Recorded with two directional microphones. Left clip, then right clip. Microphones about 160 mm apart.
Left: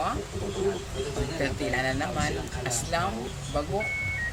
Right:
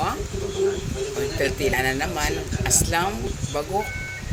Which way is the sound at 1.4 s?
45° right (ahead or behind).